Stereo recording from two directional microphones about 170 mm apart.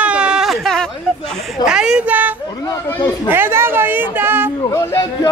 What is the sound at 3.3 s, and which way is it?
Speech, 15° right (ahead or behind).